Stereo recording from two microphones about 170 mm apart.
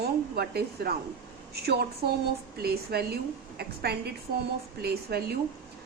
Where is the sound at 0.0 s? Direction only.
70° right (ahead or behind).